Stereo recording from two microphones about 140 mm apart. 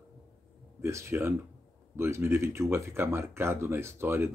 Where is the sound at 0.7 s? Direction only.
20° right (ahead or behind).